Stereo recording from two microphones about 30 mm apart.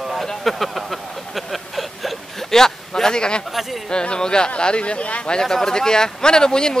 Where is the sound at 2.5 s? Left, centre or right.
Centre.